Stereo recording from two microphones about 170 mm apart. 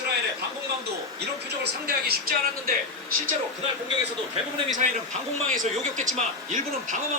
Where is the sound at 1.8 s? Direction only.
60° right (ahead or behind).